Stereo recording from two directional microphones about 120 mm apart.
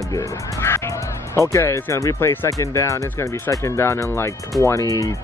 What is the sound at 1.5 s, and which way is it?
Speech, 25° left (ahead or behind).